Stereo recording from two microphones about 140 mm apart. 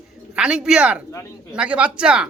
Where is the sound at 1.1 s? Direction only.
20° left (ahead or behind).